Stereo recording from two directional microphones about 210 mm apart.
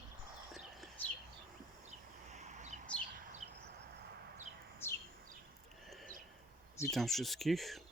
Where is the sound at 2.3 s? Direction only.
35° right (ahead or behind).